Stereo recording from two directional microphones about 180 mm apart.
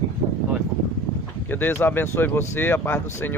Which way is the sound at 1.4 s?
10° left (ahead or behind).